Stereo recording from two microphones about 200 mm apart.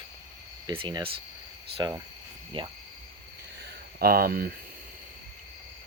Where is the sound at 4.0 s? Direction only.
50° right (ahead or behind).